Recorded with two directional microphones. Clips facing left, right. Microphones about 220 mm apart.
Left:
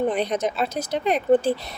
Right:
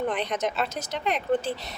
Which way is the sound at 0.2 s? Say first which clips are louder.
Left 4 dB; 35° left (ahead or behind).